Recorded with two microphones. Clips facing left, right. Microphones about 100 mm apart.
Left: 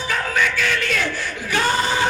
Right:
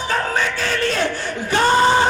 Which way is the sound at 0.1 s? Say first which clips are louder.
Right 1 dB; 35° right (ahead or behind).